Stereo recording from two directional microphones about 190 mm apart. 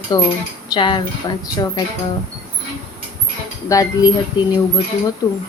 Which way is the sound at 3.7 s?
20° left (ahead or behind).